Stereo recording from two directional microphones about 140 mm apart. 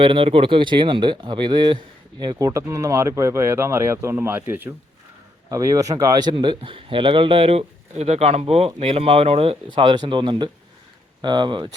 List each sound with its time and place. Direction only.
0.0 s a man's voice: 40° right (ahead or behind)